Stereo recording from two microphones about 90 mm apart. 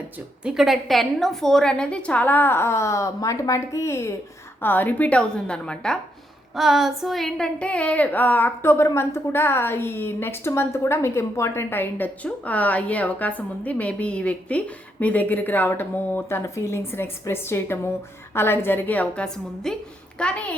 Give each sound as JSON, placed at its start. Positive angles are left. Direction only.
{"t": 0.4, "sound": "speech", "side_deg": -5}
{"t": 4.6, "sound": "a woman's voice", "side_deg": 20}
{"t": 6.6, "sound": "a woman's voice", "side_deg": -5}